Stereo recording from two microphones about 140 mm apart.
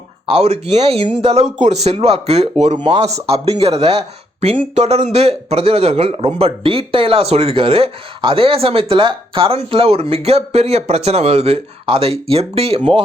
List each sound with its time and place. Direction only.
0.3 s speech: 45° right (ahead or behind)